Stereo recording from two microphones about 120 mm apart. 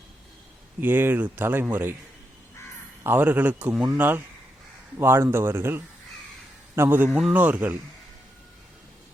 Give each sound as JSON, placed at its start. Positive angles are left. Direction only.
{"t": 0.8, "sound": "speech", "side_deg": -15}
{"t": 3.0, "sound": "speech", "side_deg": -15}